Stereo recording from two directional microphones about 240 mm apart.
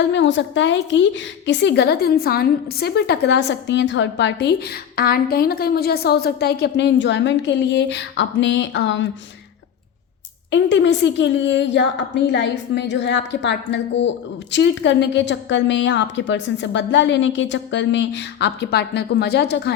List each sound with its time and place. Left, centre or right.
0.1 s a woman's voice: left
10.5 s a woman's voice: left